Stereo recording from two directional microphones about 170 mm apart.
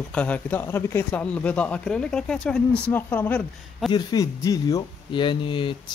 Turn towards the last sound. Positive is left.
turn(degrees=30)  # may be behind; listen again after turning